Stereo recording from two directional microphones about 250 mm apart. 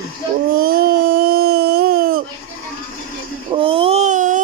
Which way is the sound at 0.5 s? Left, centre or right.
Right.